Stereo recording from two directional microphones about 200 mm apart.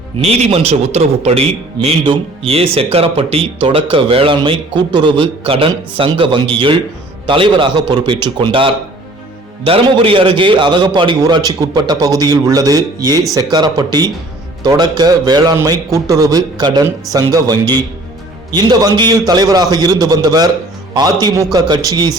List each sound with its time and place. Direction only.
0.2 s a man's voice: 30° right (ahead or behind)